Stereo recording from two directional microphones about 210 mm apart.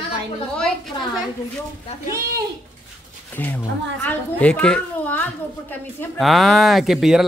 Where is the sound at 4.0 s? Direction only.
10° left (ahead or behind).